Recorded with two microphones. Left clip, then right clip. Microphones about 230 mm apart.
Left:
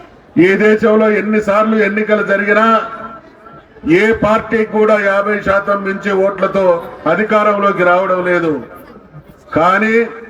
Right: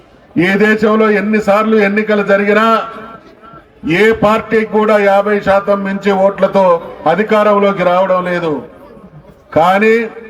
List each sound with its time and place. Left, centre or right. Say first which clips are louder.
0.3 s a man's voice: left 1 dB; right
3.8 s a man's voice: right 1 dB; right
9.6 s a man's voice: right 2 dB; right